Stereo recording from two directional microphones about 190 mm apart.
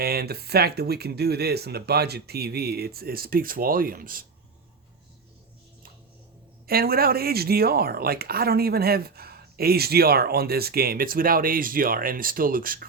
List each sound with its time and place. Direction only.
0.0 s speech: 55° right (ahead or behind)
6.7 s speech: 50° right (ahead or behind)